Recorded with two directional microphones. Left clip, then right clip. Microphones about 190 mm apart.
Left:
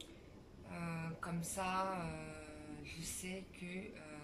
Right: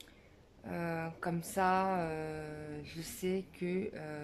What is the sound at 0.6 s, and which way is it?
Speech, 50° right (ahead or behind).